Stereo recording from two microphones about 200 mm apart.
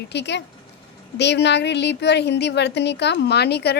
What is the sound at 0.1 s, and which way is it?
A woman's voice, 60° left (ahead or behind).